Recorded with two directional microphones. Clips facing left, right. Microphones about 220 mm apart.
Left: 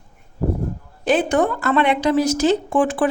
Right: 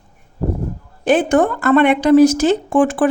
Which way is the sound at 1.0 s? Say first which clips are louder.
Right 4 dB; 50° right (ahead or behind).